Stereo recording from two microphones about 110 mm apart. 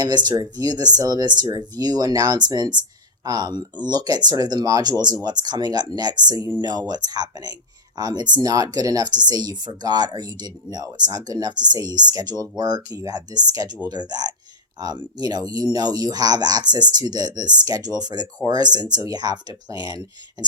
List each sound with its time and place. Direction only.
0.0 s speech: 40° right (ahead or behind)